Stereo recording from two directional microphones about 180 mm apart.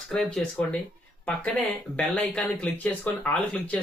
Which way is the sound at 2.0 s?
5° left (ahead or behind).